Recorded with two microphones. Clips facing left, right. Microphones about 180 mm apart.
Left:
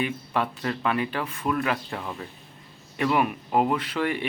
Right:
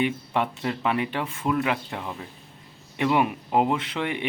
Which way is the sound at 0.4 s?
15° right (ahead or behind).